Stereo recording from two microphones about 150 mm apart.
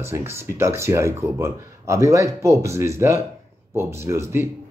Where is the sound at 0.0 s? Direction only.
15° right (ahead or behind).